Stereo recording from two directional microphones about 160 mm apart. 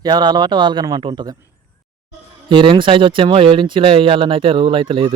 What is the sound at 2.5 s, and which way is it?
Speech, 30° right (ahead or behind).